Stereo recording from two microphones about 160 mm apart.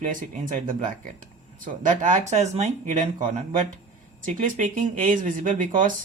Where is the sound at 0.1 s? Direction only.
55° right (ahead or behind).